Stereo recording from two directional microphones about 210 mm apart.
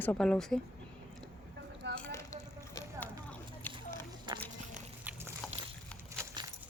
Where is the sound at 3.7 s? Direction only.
10° left (ahead or behind).